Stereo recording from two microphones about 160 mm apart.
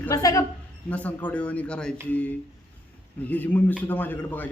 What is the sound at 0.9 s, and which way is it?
A man's voice, 10° left (ahead or behind).